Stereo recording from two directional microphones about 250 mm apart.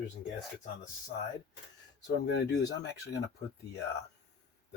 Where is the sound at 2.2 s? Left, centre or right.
Left.